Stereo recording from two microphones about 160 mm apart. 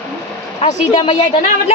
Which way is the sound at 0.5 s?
35° left (ahead or behind).